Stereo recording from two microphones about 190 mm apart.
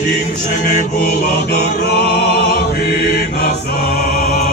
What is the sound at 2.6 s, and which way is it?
Music, 55° left (ahead or behind).